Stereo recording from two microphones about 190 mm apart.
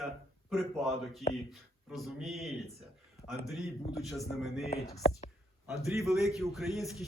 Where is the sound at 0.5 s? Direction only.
Centre (ahead or behind).